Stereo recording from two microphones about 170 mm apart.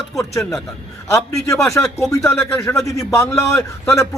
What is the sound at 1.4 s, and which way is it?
A man's voice, 15° left (ahead or behind).